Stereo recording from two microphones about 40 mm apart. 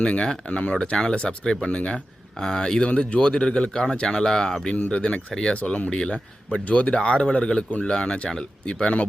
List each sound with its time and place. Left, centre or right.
0.0 s speech: left
2.4 s speech: centre
4.9 s speech: left
5.5 s speech: left
5.9 s speech: left